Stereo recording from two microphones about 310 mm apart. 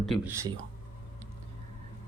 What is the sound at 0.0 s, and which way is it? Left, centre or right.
Speech, centre.